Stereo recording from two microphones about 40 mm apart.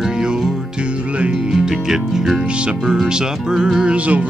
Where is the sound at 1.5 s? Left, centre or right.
Centre.